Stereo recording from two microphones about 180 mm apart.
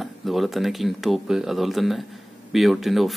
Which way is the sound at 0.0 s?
Centre (ahead or behind).